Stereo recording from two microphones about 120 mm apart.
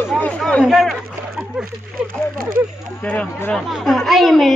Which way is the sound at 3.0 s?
15° left (ahead or behind).